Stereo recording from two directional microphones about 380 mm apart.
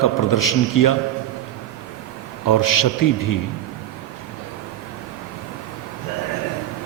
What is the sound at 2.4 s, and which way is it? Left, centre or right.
Speech, left.